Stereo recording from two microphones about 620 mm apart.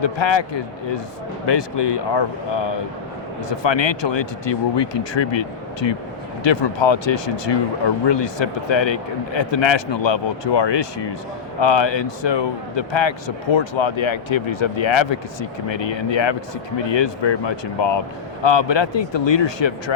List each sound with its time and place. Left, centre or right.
0.0 s speech: left